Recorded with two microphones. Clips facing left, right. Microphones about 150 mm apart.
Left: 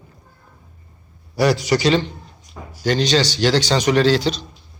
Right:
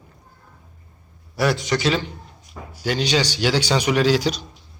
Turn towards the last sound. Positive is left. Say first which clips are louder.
# left 2 dB
turn(degrees=-10)  # may be behind; listen again after turning